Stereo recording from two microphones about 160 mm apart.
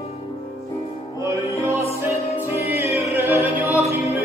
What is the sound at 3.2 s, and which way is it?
Music, 10° right (ahead or behind).